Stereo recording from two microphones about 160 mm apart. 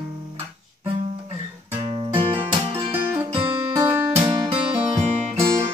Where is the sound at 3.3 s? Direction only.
15° right (ahead or behind).